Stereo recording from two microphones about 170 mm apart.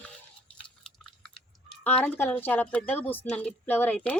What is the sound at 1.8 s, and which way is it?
A woman's voice, 10° left (ahead or behind).